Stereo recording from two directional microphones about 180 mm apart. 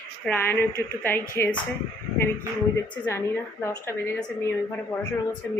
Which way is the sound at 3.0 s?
10° left (ahead or behind).